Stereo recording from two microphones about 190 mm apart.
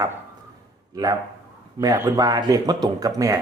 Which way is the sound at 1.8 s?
20° right (ahead or behind).